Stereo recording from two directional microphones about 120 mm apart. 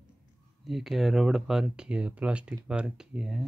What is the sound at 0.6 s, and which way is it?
Speech, centre (ahead or behind).